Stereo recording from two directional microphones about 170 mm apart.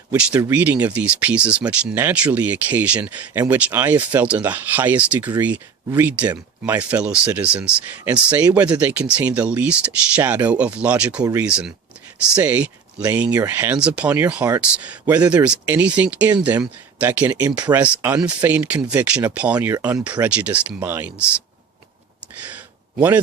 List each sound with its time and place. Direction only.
0.1 s speech: 10° right (ahead or behind)
11.2 s speech: 20° right (ahead or behind)
11.4 s speech: 5° right (ahead or behind)
22.4 s a sound: 10° right (ahead or behind)